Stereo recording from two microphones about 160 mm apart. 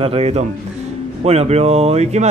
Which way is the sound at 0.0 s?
40° right (ahead or behind).